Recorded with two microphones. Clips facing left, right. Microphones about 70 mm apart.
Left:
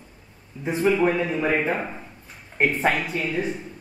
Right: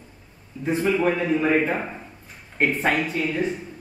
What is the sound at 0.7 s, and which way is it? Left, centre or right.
A man's voice, centre.